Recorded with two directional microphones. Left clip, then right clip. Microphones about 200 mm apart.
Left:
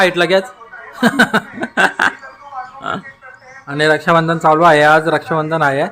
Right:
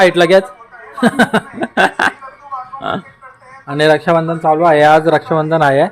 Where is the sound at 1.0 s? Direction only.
15° right (ahead or behind).